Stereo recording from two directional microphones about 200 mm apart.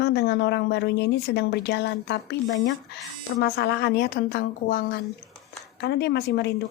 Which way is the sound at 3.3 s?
55° left (ahead or behind).